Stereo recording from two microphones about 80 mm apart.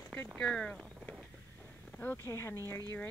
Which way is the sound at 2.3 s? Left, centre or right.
Left.